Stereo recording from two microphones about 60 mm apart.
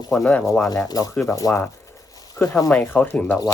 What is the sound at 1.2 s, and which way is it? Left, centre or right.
Speech, left.